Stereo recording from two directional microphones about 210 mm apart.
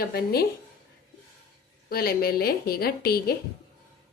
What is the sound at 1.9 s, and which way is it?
A woman's voice, 45° left (ahead or behind).